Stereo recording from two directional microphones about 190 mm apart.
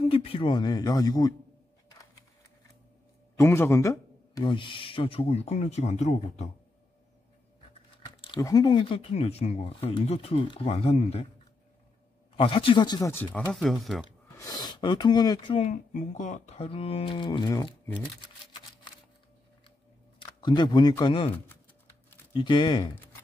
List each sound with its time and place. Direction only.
0.0 s speech: 30° left (ahead or behind)
3.3 s speech: 15° left (ahead or behind); by 6.5 s 35° left (ahead or behind)
8.2 s speech: 20° left (ahead or behind)
12.4 s speech: 30° left (ahead or behind); by 14.0 s centre (ahead or behind)
14.0 s speech: 20° left (ahead or behind)
20.2 s speech: 25° left (ahead or behind)
22.3 s speech: 25° left (ahead or behind)